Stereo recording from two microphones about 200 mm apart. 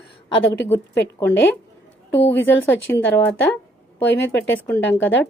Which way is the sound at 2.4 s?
10° left (ahead or behind).